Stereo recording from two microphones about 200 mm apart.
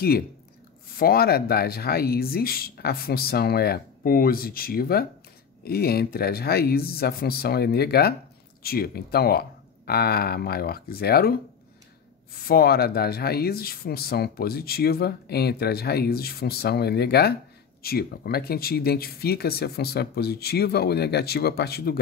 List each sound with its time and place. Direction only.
0.9 s speech: 50° left (ahead or behind)
12.4 s speech: 50° left (ahead or behind)